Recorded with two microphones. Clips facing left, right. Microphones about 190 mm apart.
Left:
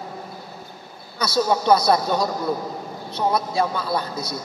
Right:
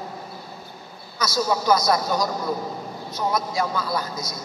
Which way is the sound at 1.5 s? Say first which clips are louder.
Left 3 dB; 30° left (ahead or behind).